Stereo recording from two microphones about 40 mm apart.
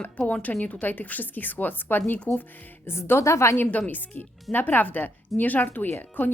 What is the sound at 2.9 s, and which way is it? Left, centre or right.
Speech, left.